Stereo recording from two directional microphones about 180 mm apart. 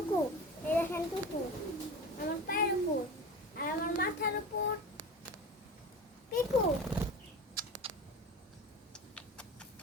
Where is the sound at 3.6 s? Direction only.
55° left (ahead or behind).